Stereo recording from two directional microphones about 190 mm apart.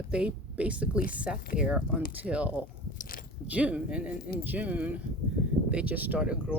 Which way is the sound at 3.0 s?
50° left (ahead or behind).